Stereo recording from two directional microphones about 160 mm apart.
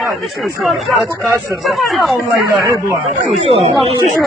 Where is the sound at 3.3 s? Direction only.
40° right (ahead or behind).